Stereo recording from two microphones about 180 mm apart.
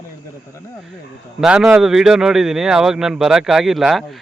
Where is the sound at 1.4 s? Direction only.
5° right (ahead or behind).